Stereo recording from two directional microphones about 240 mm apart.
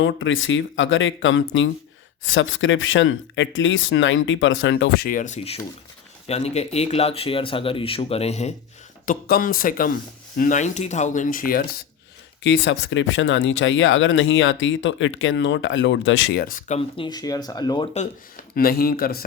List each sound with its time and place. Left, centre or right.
0.0 s speech: left
12.4 s speech: left; by 17.8 s centre
17.9 s speech: left